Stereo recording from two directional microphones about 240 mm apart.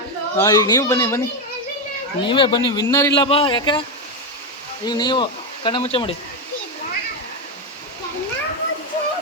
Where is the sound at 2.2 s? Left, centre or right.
Centre.